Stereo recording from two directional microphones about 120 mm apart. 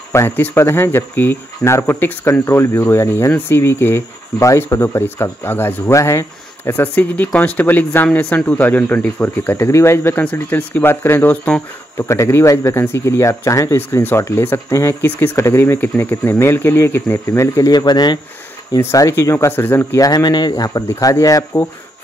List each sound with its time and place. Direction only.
0.1 s speech: 20° left (ahead or behind)
12.1 s speech: 25° left (ahead or behind)
18.8 s speech: 25° left (ahead or behind)
20.1 s speech: 35° left (ahead or behind)